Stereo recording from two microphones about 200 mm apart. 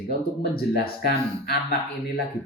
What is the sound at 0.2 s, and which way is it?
A man's voice, 50° left (ahead or behind).